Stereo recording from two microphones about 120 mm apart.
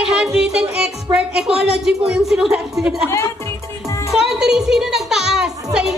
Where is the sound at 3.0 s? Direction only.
25° left (ahead or behind).